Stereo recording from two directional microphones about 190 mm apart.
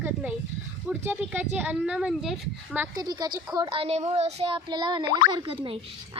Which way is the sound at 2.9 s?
20° right (ahead or behind).